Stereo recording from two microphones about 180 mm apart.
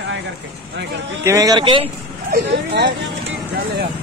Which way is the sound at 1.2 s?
20° right (ahead or behind).